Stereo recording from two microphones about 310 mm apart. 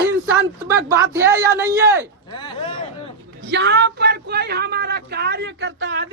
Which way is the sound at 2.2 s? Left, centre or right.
Centre.